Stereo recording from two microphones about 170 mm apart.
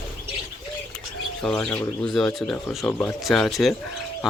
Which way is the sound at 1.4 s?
5° left (ahead or behind).